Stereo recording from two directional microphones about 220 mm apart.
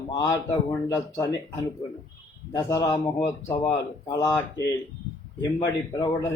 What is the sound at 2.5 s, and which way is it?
Speech, 15° left (ahead or behind).